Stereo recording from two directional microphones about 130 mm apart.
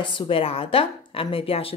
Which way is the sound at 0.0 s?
40° left (ahead or behind).